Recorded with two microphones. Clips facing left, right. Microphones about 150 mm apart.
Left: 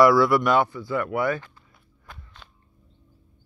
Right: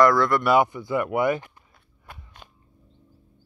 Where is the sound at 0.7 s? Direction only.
20° right (ahead or behind).